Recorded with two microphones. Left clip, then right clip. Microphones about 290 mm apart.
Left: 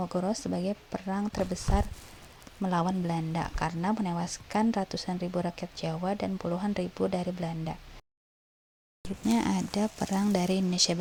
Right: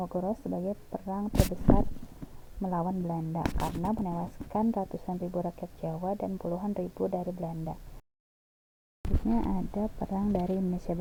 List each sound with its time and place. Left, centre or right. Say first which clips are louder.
0.0 s speech: left 1 dB; left
2.6 s speech: left 3 dB; left
9.3 s speech: left 4 dB; left